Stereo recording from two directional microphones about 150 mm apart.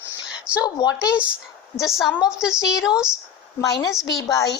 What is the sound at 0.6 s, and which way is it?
Speech, 25° left (ahead or behind).